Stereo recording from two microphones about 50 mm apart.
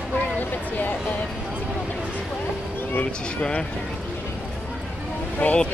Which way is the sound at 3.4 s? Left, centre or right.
Left.